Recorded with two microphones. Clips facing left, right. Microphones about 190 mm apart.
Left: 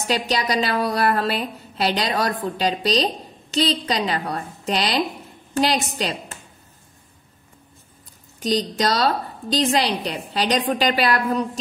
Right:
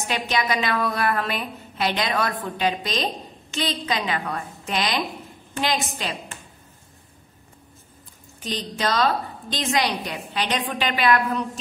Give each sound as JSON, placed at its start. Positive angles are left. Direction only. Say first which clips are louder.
{"t": 0.1, "sound": "a woman's voice", "louder": "left 3 dB", "side_deg": 35}
{"t": 8.4, "sound": "a woman's voice", "louder": "left 7 dB", "side_deg": 40}